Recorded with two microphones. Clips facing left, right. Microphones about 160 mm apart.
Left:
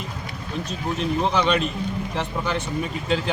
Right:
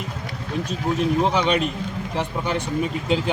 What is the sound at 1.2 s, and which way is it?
Speech, 15° right (ahead or behind).